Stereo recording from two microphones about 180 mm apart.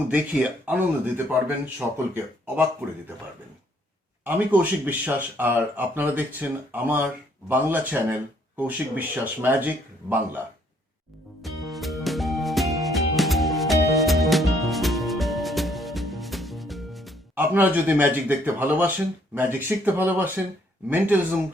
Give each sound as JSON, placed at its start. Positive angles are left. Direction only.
{"t": 0.1, "sound": "speech", "side_deg": -10}
{"t": 4.2, "sound": "speech", "side_deg": -10}
{"t": 11.4, "sound": "music", "side_deg": 0}
{"t": 17.3, "sound": "speech", "side_deg": -10}